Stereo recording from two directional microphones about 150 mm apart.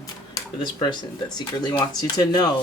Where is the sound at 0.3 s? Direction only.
30° left (ahead or behind).